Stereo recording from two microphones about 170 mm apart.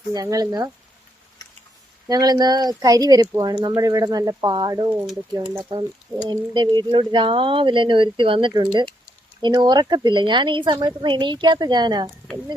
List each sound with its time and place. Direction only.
0.1 s speech: 20° right (ahead or behind)
2.0 s speech: 25° right (ahead or behind)